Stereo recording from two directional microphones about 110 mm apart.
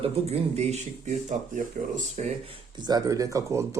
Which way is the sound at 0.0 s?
75° right (ahead or behind).